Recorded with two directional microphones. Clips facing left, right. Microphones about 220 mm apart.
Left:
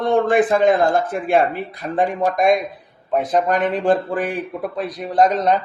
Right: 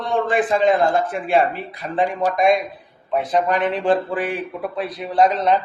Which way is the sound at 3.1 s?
45° left (ahead or behind).